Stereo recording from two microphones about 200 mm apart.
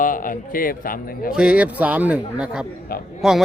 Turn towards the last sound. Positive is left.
turn(degrees=0)  # may be behind; listen again after turning